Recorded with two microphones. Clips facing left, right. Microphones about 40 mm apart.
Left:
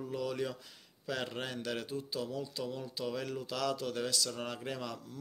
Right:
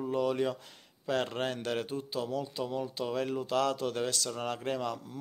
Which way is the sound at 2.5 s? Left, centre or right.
Right.